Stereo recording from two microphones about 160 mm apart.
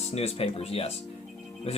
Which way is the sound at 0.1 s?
40° left (ahead or behind).